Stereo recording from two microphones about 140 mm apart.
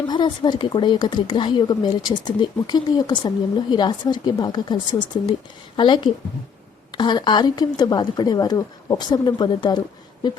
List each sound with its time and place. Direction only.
0.1 s speech: 30° left (ahead or behind)